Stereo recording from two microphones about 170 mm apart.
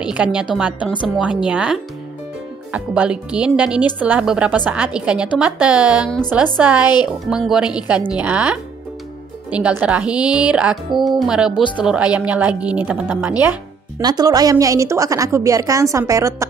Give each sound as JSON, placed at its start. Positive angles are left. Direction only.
{"t": 0.0, "sound": "a woman's voice", "side_deg": -5}
{"t": 13.9, "sound": "a woman's voice", "side_deg": -20}